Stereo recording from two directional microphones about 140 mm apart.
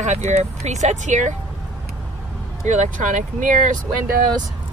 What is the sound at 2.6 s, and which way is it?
Speech, 60° right (ahead or behind).